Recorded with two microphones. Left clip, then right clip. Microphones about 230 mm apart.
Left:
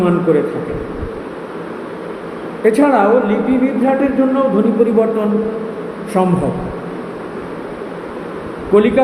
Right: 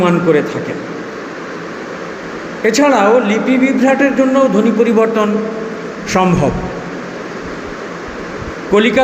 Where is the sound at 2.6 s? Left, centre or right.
Right.